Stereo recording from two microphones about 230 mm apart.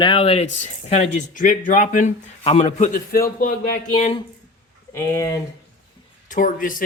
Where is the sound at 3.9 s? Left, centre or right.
Left.